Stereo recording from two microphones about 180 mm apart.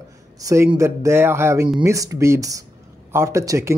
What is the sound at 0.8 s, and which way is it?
Speech, 15° right (ahead or behind).